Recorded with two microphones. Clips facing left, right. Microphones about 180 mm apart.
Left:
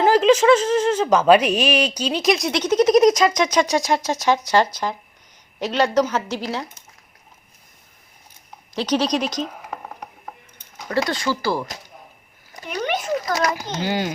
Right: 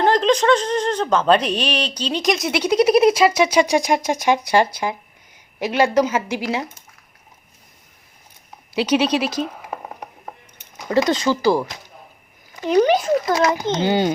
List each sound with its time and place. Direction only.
0.0 s a woman's voice: 5° left (ahead or behind); by 6.4 s 10° right (ahead or behind)
8.7 s speech: 10° right (ahead or behind)
10.8 s a child's voice: 20° right (ahead or behind)
12.7 s a child's voice: 30° right (ahead or behind)